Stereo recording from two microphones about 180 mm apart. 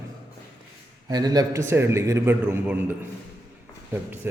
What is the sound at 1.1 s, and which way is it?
A man's voice, 20° right (ahead or behind).